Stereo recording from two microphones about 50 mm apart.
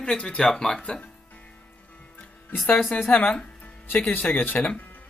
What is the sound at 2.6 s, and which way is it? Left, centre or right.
Speech, left.